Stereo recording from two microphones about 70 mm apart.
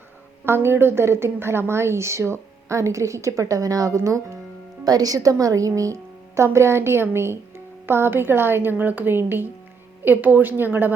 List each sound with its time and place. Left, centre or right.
0.4 s a woman's voice: right
4.9 s a woman's voice: right